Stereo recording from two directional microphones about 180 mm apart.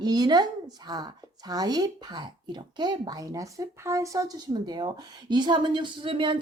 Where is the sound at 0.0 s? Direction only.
20° right (ahead or behind).